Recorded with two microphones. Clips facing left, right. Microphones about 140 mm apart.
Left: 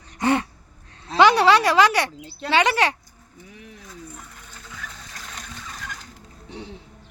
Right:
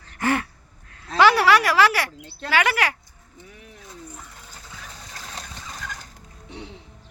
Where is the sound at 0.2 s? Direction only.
20° left (ahead or behind).